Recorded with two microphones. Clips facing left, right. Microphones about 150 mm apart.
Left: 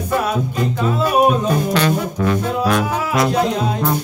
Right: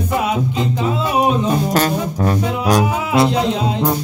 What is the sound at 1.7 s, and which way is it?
Music, 40° right (ahead or behind).